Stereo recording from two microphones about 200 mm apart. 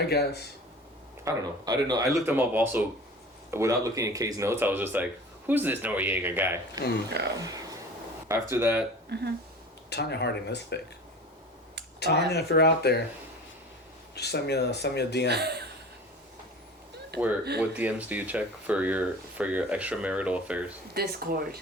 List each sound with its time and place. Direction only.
0.1 s speech: 55° left (ahead or behind)
1.2 s speech: 20° right (ahead or behind)
2.0 s speech: 5° right (ahead or behind)
9.1 s speech: 55° right (ahead or behind)
9.9 s speech: 55° left (ahead or behind)
11.9 s speech: 55° left (ahead or behind)
14.2 s speech: 55° left (ahead or behind)
15.3 s speech: 55° right (ahead or behind)
17.1 s speech: 55° right (ahead or behind)
17.6 s speech: 5° right (ahead or behind)
20.9 s speech: 50° right (ahead or behind)